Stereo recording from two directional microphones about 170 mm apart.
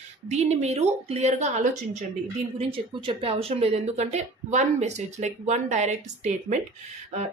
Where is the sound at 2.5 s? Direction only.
35° right (ahead or behind).